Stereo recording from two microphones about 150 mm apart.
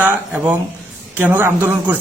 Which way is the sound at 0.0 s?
10° right (ahead or behind).